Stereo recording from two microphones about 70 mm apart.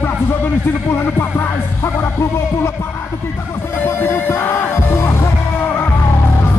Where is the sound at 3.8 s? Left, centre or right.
Left.